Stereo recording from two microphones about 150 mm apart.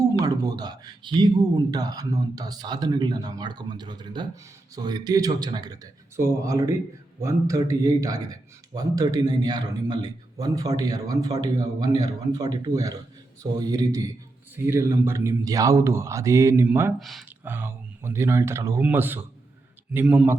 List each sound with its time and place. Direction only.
0.0 s a man's voice: 25° right (ahead or behind)
17.0 s speech: centre (ahead or behind)
17.4 s a man's voice: 15° right (ahead or behind)